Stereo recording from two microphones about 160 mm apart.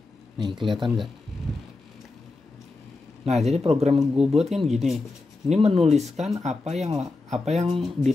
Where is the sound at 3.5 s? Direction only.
40° right (ahead or behind).